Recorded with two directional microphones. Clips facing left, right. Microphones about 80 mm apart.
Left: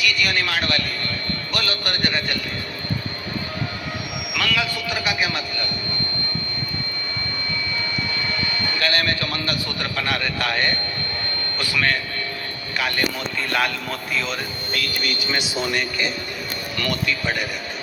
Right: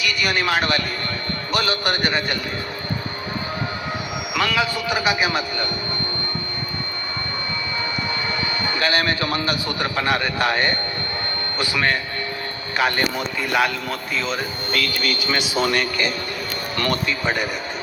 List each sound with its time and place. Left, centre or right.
0.0 s a man's voice: right
4.3 s a man's voice: right
8.6 s a man's voice: right
13.5 s a man's voice: centre
14.7 s speech: right
15.5 s speech: right
16.7 s speech: right
17.1 s a man's voice: right